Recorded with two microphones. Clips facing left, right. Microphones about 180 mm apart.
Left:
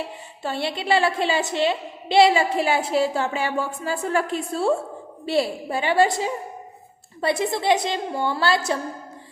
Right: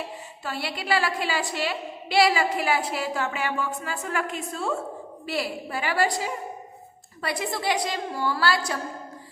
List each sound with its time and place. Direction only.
0.4 s a woman's voice: 25° left (ahead or behind)